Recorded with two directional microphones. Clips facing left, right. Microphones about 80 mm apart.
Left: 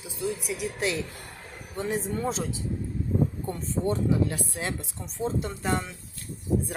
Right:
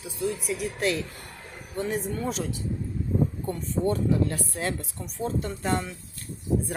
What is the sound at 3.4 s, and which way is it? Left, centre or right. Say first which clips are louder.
Speech: right 2 dB; centre.